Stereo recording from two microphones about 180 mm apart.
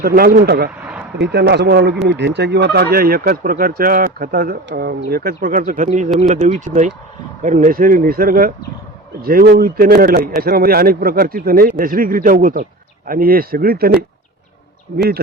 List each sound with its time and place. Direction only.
0.0 s speech: 60° right (ahead or behind)